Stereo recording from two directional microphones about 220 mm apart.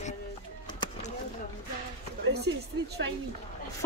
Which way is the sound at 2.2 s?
50° right (ahead or behind).